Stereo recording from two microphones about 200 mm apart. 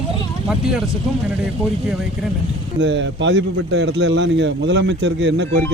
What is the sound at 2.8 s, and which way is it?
A man's voice, 65° right (ahead or behind).